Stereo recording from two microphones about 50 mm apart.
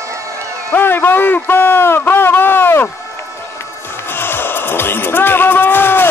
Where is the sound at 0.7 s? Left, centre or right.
Left.